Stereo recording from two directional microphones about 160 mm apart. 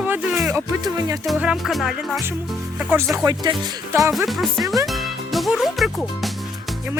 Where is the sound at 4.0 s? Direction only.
Centre (ahead or behind).